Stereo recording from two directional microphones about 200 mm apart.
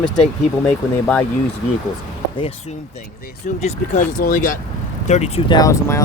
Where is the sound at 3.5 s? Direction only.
35° left (ahead or behind).